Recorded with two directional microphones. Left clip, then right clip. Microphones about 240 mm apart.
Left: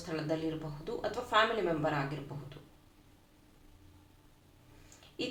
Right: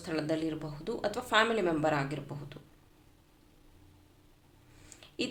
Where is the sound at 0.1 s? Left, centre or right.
Right.